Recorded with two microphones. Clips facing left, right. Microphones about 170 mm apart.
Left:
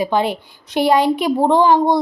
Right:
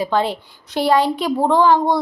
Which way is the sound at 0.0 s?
15° left (ahead or behind).